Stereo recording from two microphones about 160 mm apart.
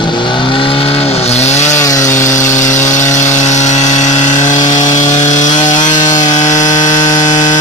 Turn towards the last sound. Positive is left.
turn(degrees=25)  # may be behind; listen again after turning